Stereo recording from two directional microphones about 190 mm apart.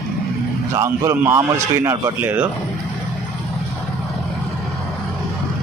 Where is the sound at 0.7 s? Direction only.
15° right (ahead or behind).